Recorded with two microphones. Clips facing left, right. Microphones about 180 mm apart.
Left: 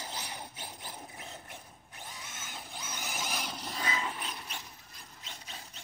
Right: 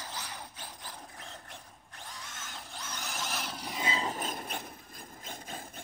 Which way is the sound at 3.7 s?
25° right (ahead or behind).